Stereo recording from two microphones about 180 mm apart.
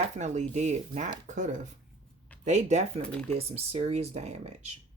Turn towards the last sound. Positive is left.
turn(degrees=-40)  # may be behind; listen again after turning